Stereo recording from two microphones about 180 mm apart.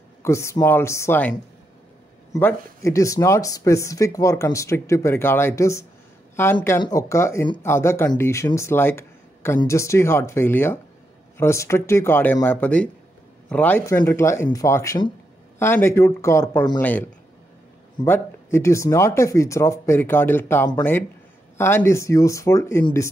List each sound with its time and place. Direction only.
0.2 s speech: 15° left (ahead or behind)
2.3 s speech: 15° left (ahead or behind)